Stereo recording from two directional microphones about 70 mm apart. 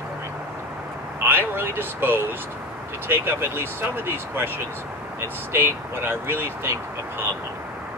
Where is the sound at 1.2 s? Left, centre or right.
Right.